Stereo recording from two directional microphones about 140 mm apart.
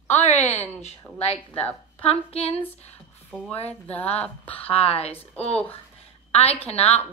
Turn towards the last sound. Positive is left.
turn(degrees=50)  # may be behind; listen again after turning